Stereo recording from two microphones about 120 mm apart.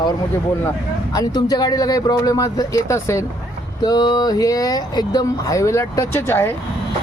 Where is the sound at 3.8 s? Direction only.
35° left (ahead or behind).